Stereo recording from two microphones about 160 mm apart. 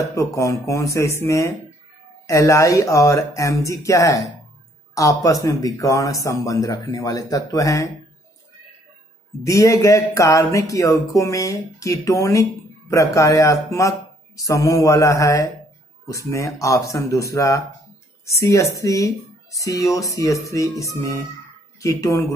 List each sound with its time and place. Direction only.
0.1 s speech: 20° left (ahead or behind)
9.4 s speech: 20° left (ahead or behind)